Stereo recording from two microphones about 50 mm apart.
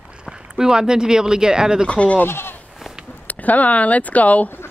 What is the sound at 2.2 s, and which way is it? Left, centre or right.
Goat, left.